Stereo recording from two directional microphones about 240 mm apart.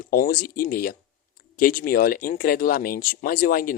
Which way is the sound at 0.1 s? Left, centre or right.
Left.